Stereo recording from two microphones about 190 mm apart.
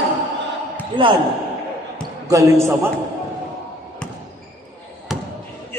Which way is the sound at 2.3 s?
15° right (ahead or behind).